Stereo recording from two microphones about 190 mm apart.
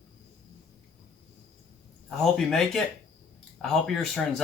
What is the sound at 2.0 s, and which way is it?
Speech, centre (ahead or behind).